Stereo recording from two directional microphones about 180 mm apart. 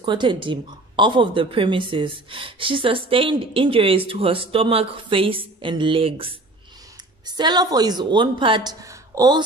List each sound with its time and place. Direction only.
0.0 s a woman's voice: 25° right (ahead or behind)